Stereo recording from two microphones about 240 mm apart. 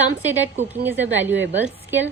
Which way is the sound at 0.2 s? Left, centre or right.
Centre.